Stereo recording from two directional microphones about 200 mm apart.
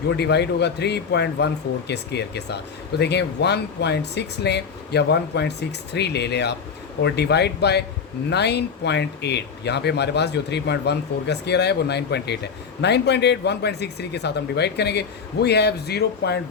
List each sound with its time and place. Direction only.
0.1 s speech: 55° left (ahead or behind)